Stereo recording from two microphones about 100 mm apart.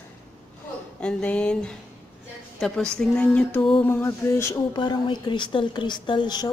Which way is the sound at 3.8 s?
25° left (ahead or behind).